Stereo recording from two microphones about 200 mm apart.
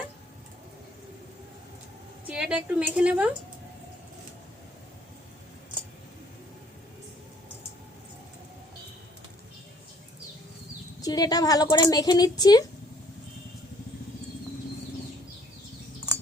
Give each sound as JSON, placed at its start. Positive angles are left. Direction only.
{"t": 2.2, "sound": "a woman's voice", "side_deg": -5}
{"t": 11.0, "sound": "speech", "side_deg": 20}